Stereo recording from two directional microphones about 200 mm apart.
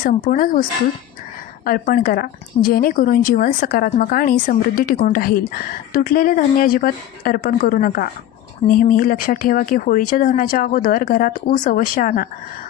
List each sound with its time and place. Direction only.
0.0 s a woman's voice: 45° left (ahead or behind)